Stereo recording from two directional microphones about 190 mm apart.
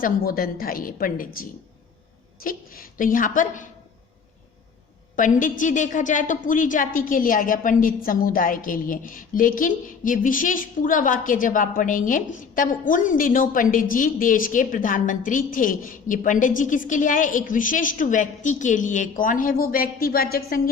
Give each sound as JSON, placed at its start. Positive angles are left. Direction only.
{"t": 0.0, "sound": "a woman's voice", "side_deg": 50}
{"t": 5.1, "sound": "a woman's voice", "side_deg": 45}